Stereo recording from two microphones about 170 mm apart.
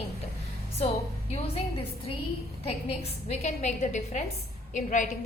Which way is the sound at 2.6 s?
40° left (ahead or behind).